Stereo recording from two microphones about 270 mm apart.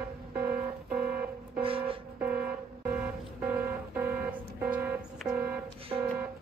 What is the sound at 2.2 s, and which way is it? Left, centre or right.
Vehicle, centre.